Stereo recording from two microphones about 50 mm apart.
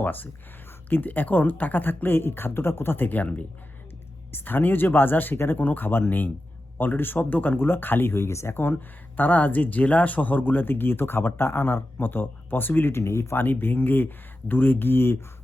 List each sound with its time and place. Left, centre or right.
0.0 s speech: left
8.1 s speech: left
9.1 s speech: left
12.9 s speech: left
13.3 s speech: left